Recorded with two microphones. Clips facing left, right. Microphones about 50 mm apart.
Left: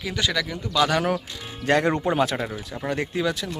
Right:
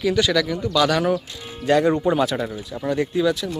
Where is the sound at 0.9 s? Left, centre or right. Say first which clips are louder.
Right 3 dB; left.